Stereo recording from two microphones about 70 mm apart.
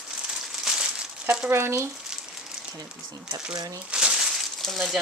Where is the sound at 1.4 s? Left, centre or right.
Right.